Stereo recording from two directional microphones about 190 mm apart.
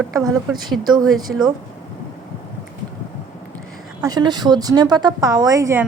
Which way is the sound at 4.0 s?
20° right (ahead or behind).